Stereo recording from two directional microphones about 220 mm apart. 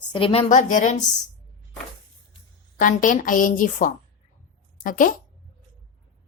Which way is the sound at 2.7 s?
35° left (ahead or behind).